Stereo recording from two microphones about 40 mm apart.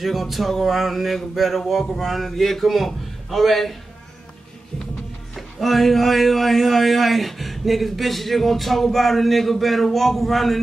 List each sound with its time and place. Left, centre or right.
0.0 s a man's voice: centre
5.3 s a man's voice: centre